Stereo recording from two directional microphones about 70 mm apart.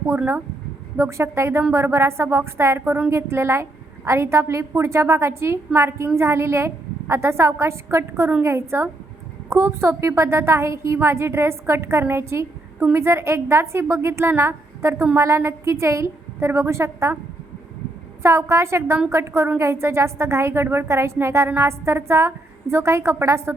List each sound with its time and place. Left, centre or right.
0.9 s a woman's voice: right
18.2 s a woman's voice: right